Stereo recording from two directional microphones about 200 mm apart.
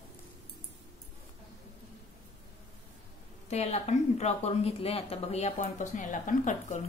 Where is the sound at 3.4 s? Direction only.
30° left (ahead or behind).